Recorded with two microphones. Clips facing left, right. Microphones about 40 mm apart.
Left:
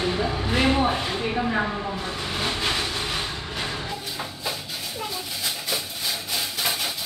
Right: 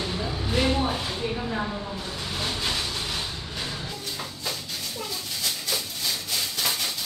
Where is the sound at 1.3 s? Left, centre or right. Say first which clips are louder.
Left 5 dB; left.